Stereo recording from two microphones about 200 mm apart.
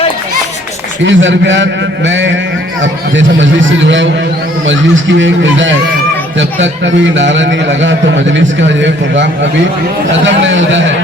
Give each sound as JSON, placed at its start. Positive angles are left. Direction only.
{"t": 1.0, "sound": "a man's voice", "side_deg": -70}